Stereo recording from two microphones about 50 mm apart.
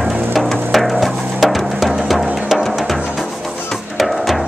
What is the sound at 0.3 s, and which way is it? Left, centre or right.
Music, centre.